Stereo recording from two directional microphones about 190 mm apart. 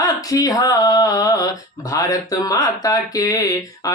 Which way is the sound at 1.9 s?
20° left (ahead or behind).